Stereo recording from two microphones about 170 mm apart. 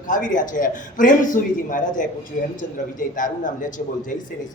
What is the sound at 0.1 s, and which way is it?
A woman's voice, 50° left (ahead or behind).